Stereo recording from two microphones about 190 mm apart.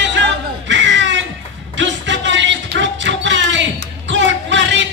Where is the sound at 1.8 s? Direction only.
70° right (ahead or behind).